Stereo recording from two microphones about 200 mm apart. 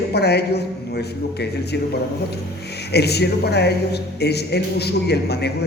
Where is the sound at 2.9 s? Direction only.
55° left (ahead or behind).